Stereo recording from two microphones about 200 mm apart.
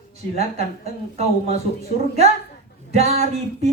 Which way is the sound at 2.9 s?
30° right (ahead or behind).